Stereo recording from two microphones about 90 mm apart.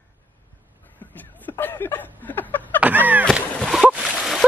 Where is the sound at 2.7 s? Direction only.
20° right (ahead or behind).